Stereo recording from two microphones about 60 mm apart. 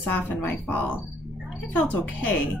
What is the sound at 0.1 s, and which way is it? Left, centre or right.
Speech, left.